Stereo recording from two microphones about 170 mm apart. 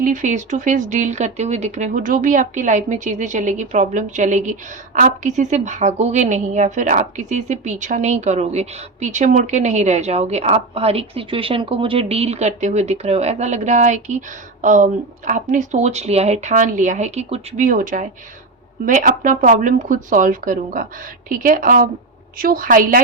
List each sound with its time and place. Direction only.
0.0 s a woman's voice: 50° right (ahead or behind)